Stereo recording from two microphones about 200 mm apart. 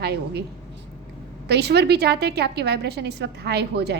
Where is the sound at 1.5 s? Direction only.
55° right (ahead or behind).